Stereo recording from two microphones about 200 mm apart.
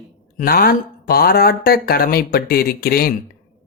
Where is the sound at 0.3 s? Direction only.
45° left (ahead or behind).